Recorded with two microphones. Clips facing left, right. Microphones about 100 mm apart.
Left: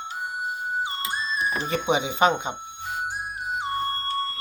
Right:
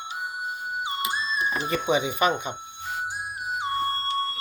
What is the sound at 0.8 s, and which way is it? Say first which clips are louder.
Music: right 1 dB; 15° right (ahead or behind).